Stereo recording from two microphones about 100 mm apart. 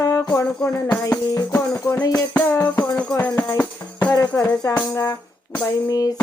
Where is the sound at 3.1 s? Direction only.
20° left (ahead or behind).